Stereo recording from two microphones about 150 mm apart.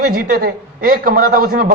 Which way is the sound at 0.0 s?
75° right (ahead or behind).